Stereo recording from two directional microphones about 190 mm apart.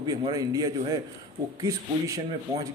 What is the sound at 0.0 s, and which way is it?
A man's voice, 20° right (ahead or behind).